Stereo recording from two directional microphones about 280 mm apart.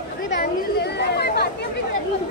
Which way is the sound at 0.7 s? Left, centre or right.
Left.